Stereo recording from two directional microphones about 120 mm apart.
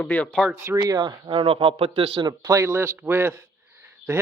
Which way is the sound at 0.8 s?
30° right (ahead or behind).